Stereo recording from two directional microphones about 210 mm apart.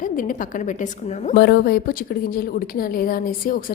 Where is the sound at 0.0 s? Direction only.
40° left (ahead or behind).